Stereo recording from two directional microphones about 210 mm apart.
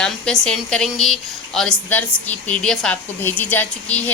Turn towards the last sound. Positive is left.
turn(degrees=10)  # may be behind; listen again after turning